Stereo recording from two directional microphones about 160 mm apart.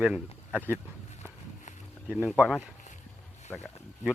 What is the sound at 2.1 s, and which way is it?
Speech, 5° right (ahead or behind).